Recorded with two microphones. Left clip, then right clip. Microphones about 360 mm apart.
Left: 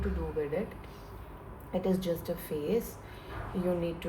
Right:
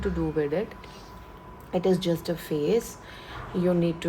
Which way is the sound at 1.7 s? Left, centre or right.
Right.